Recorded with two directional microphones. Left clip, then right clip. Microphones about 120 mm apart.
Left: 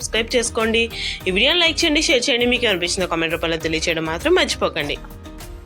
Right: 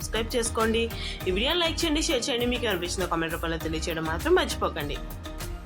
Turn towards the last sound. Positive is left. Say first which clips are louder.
# left 8 dB
turn(degrees=35)  # may be behind; listen again after turning